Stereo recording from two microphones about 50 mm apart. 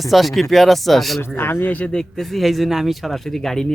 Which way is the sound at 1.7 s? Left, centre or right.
Left.